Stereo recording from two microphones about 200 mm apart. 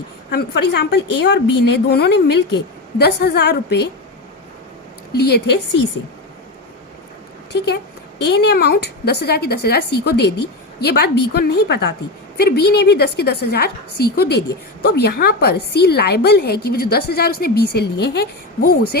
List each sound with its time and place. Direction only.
0.3 s a woman's voice: 55° left (ahead or behind)
5.1 s a woman's voice: 55° left (ahead or behind)
7.5 s a woman's voice: 55° left (ahead or behind)